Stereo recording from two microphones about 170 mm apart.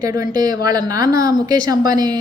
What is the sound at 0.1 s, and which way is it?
A woman's voice, 20° right (ahead or behind).